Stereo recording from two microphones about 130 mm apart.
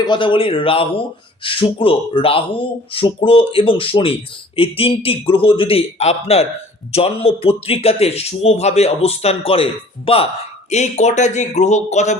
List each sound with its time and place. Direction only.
0.0 s speech: 35° left (ahead or behind)
10.7 s speech: 60° left (ahead or behind)